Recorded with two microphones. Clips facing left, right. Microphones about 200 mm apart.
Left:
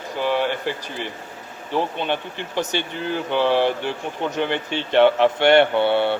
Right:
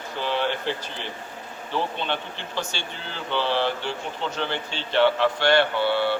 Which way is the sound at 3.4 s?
50° left (ahead or behind).